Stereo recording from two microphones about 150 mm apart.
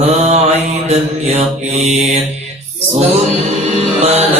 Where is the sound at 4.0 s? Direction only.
45° right (ahead or behind).